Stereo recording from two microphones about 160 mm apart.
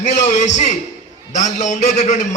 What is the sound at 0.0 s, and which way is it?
A man's voice, 45° left (ahead or behind).